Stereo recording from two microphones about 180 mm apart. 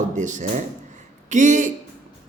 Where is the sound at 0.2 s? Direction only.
45° right (ahead or behind).